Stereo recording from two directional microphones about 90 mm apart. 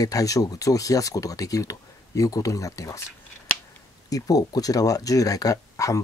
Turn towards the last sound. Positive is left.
turn(degrees=35)  # may be behind; listen again after turning